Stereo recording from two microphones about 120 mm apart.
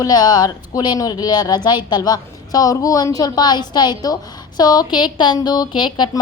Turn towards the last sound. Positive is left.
turn(degrees=40)  # may be behind; listen again after turning